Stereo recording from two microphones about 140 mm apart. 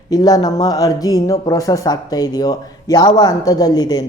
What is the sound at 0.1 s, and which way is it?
Speech, 25° left (ahead or behind).